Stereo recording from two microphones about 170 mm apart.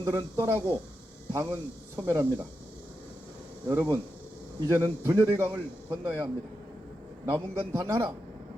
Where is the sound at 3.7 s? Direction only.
15° right (ahead or behind).